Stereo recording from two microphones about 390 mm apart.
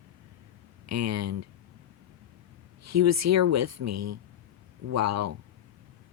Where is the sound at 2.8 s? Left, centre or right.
Right.